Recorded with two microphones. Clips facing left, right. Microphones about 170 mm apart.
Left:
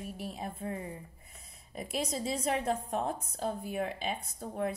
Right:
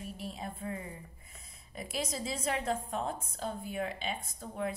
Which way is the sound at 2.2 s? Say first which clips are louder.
Left 4 dB; 50° left (ahead or behind).